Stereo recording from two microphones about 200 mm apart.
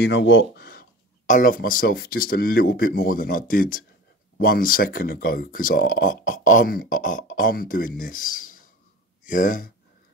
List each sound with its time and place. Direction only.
0.0 s speech: 60° left (ahead or behind); by 9.7 s 40° left (ahead or behind)